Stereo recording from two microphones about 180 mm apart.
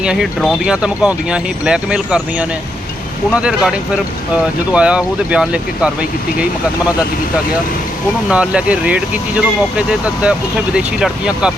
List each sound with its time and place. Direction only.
0.0 s speech: 5° right (ahead or behind)
8.3 s speech: 5° right (ahead or behind)